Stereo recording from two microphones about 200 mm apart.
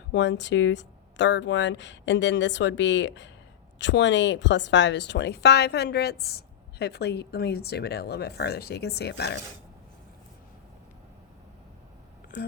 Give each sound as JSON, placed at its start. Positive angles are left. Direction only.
{"t": 0.1, "sound": "speech", "side_deg": 65}